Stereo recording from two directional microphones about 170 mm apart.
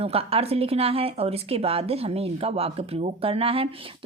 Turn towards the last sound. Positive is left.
turn(degrees=-35)  # may be behind; listen again after turning